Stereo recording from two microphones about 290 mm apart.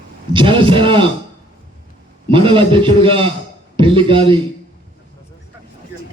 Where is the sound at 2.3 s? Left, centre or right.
Centre.